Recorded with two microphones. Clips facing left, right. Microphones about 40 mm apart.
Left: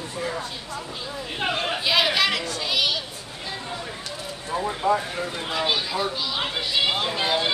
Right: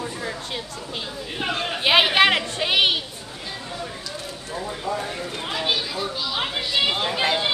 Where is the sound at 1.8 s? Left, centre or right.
Right.